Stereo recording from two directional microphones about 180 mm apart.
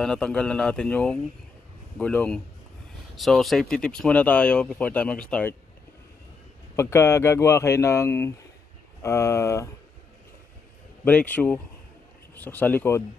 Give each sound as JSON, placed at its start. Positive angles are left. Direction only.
{"t": 0.0, "sound": "speech", "side_deg": 5}
{"t": 6.7, "sound": "speech", "side_deg": 15}
{"t": 11.1, "sound": "speech", "side_deg": 5}